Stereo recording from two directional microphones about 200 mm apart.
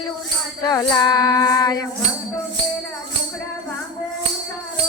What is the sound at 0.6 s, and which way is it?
Music, 20° left (ahead or behind).